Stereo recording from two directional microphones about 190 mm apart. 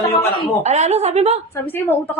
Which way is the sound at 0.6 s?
35° right (ahead or behind).